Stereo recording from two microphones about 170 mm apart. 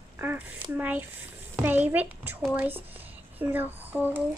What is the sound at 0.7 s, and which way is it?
Speech, 10° right (ahead or behind).